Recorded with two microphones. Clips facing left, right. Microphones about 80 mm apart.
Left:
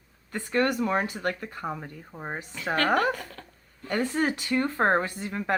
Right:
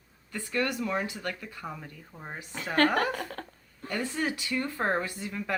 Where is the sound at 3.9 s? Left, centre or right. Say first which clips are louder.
Left 5 dB; left.